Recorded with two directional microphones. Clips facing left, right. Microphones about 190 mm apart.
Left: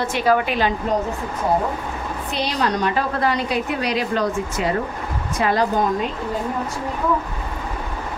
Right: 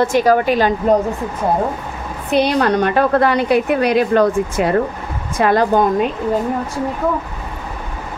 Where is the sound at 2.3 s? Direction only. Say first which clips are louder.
Right 9 dB; 55° right (ahead or behind).